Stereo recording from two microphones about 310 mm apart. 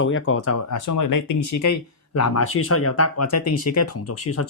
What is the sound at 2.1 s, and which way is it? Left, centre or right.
Speech, left.